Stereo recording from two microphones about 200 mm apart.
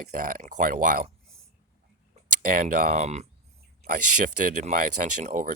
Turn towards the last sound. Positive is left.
turn(degrees=-40)  # may be behind; listen again after turning